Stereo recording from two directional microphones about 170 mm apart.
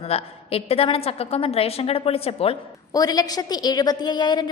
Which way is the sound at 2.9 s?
20° left (ahead or behind).